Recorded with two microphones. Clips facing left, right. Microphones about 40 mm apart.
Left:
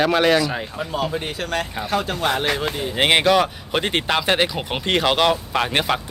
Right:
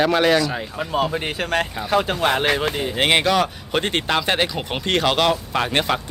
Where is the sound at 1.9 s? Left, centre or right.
Centre.